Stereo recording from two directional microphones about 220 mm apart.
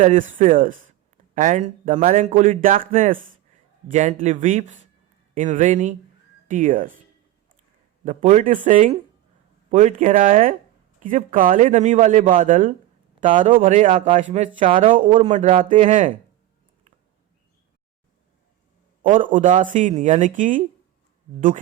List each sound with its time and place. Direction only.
0.0 s a man's voice: 35° right (ahead or behind)
8.0 s a man's voice: 35° right (ahead or behind)
19.0 s a man's voice: 35° right (ahead or behind)